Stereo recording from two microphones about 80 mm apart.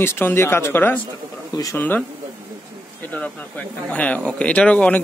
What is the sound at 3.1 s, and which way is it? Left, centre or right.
Speech, centre.